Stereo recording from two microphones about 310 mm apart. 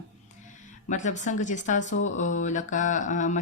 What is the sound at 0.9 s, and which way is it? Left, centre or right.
A woman's voice, left.